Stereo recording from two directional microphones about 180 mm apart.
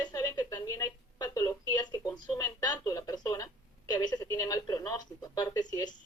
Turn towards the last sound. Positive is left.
turn(degrees=20)  # may be behind; listen again after turning